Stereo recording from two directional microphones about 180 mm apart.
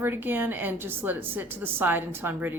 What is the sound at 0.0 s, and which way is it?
A woman's voice, 10° right (ahead or behind).